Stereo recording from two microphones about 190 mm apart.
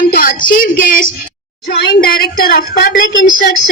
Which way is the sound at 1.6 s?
60° left (ahead or behind).